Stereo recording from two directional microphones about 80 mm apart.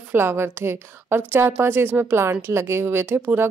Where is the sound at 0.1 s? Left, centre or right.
Right.